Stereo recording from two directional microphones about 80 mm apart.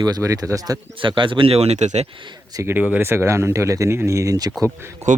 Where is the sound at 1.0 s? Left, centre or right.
Right.